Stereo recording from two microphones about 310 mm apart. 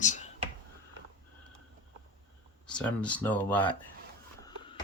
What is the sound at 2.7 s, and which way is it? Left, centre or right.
Speech, centre.